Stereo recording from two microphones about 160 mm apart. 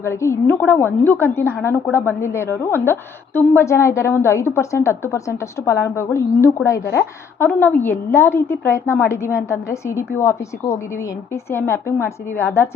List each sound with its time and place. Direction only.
0.0 s a woman's voice: 15° left (ahead or behind)